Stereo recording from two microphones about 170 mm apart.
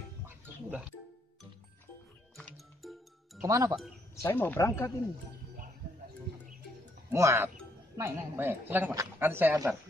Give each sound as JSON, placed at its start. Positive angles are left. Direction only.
{"t": 2.5, "sound": "music", "side_deg": 0}
{"t": 3.4, "sound": "speech", "side_deg": -20}
{"t": 4.1, "sound": "speech", "side_deg": 15}
{"t": 7.1, "sound": "speech", "side_deg": -15}